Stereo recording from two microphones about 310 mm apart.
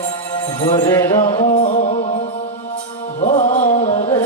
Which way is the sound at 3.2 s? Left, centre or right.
Left.